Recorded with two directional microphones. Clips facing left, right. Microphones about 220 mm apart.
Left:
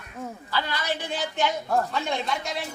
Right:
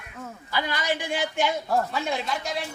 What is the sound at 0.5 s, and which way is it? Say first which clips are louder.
A woman's voice: right 2 dB; 15° right (ahead or behind).